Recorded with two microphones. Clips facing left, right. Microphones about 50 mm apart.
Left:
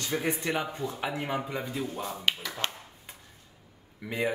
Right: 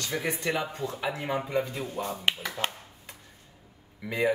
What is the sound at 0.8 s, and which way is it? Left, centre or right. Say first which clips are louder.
Speech: even; centre.